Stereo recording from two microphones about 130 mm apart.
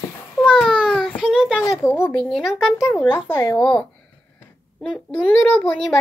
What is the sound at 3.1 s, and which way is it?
Speech, 15° left (ahead or behind).